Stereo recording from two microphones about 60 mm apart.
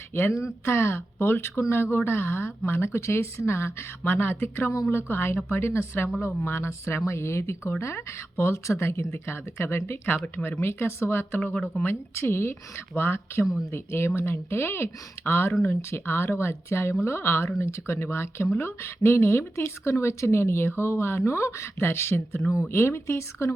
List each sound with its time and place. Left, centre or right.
0.1 s a woman's voice: left